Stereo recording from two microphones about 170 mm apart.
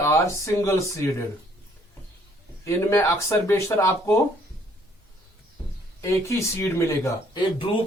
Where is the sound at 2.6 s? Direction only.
15° left (ahead or behind).